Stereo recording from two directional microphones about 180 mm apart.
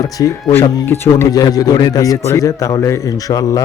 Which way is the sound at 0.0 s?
20° left (ahead or behind).